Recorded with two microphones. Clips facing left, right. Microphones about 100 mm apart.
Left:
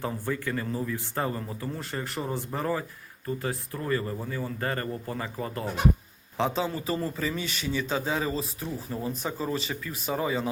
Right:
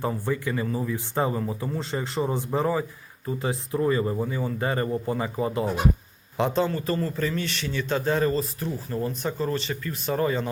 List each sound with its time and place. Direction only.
0.0 s speech: 10° right (ahead or behind)
1.8 s speech: 20° right (ahead or behind)
6.3 s a man's voice: centre (ahead or behind)